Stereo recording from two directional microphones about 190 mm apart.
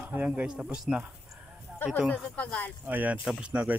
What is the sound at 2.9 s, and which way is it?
Speech, 10° right (ahead or behind).